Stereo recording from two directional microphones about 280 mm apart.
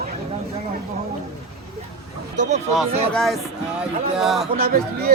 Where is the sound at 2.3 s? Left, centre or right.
Right.